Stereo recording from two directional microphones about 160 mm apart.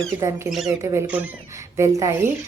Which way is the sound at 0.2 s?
20° right (ahead or behind).